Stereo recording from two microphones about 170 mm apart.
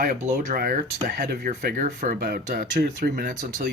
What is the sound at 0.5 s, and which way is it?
Speech, 60° right (ahead or behind).